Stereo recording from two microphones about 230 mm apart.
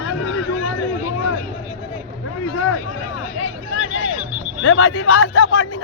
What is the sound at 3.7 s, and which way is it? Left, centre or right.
Music, left.